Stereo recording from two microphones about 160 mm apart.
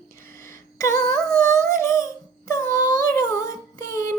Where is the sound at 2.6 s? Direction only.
60° right (ahead or behind).